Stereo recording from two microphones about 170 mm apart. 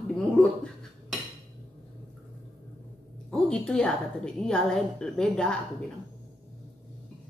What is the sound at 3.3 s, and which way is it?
A woman's voice, 5° left (ahead or behind).